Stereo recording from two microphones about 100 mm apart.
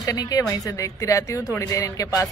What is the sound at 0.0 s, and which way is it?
A woman's voice, 35° left (ahead or behind).